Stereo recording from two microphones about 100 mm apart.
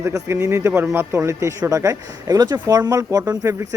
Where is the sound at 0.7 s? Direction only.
15° right (ahead or behind); by 3.8 s 30° right (ahead or behind).